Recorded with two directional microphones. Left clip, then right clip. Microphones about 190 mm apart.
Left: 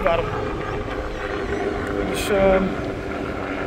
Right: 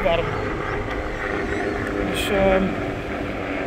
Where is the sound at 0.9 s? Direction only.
35° left (ahead or behind).